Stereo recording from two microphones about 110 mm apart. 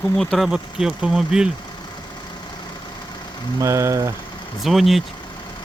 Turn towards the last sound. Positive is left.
turn(degrees=0)  # may be behind; listen again after turning